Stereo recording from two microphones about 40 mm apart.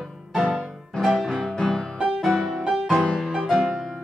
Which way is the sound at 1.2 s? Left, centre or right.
Centre.